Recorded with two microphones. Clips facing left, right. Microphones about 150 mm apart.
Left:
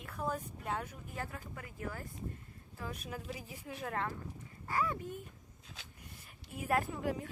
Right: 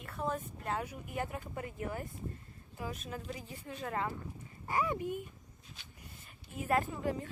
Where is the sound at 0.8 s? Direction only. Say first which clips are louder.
Right 5 dB; 15° right (ahead or behind).